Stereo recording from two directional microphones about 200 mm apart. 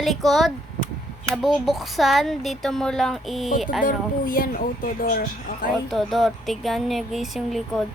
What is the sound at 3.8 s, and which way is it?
Speech, 45° left (ahead or behind).